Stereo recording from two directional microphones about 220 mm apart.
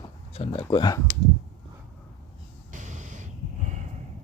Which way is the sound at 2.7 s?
35° right (ahead or behind).